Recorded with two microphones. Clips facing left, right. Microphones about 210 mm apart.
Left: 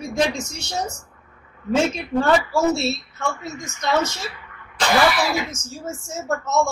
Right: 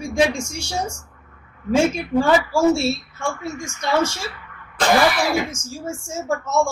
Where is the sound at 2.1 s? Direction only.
10° right (ahead or behind).